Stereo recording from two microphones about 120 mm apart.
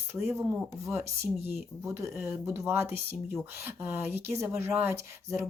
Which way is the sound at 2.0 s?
25° right (ahead or behind).